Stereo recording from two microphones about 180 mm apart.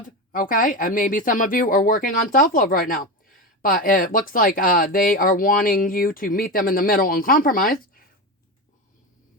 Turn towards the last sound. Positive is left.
turn(degrees=50)  # may be behind; listen again after turning